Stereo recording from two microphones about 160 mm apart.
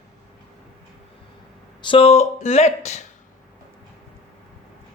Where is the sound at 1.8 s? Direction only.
35° left (ahead or behind).